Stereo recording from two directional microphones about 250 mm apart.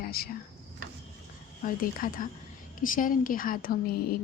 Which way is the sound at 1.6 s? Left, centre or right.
Left.